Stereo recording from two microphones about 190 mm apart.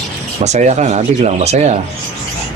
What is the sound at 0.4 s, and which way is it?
A man's voice, 35° right (ahead or behind).